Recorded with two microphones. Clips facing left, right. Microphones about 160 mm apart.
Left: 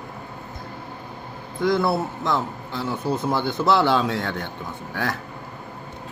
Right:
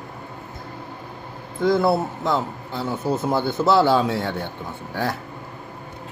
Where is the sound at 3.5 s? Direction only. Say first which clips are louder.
Right 2 dB; 5° right (ahead or behind).